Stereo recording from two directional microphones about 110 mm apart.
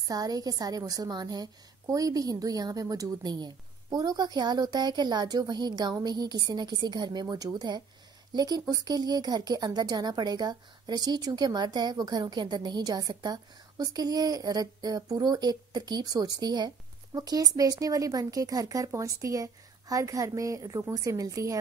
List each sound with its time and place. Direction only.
0.0 s speech: 35° right (ahead or behind)